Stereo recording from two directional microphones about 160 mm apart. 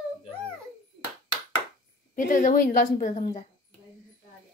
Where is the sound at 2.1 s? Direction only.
55° left (ahead or behind).